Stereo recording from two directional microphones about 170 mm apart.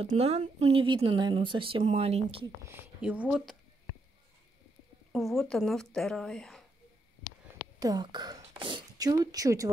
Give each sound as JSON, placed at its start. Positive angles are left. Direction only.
{"t": 0.1, "sound": "speech", "side_deg": -40}
{"t": 2.4, "sound": "speech", "side_deg": -15}
{"t": 5.1, "sound": "speech", "side_deg": 0}
{"t": 7.8, "sound": "a woman's voice", "side_deg": -25}